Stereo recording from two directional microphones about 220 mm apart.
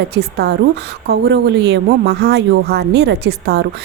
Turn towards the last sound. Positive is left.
turn(degrees=-50)  # may be behind; listen again after turning